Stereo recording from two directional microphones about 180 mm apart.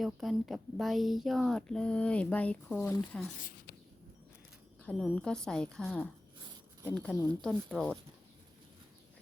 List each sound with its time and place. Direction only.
0.0 s speech: centre (ahead or behind)
4.8 s speech: 5° left (ahead or behind)